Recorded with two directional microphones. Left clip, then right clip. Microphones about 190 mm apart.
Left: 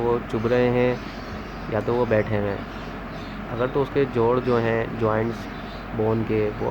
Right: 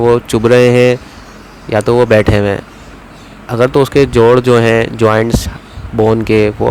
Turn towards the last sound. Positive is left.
turn(degrees=-60)  # may be behind; listen again after turning